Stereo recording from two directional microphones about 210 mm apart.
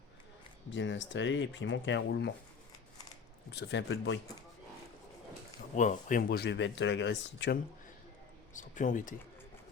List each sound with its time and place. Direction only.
0.7 s speech: 60° left (ahead or behind)
3.5 s speech: 55° left (ahead or behind)
5.7 s speech: 35° left (ahead or behind); by 7.6 s 55° left (ahead or behind)
8.5 s speech: 35° left (ahead or behind)